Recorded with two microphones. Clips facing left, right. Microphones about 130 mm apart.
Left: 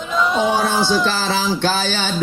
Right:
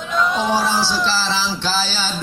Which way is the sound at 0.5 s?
55° left (ahead or behind).